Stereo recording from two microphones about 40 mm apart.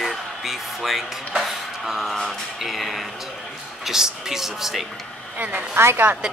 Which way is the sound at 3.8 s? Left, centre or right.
Centre.